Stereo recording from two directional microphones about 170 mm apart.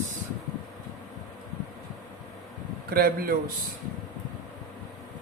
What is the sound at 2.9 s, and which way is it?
Speech, 60° right (ahead or behind).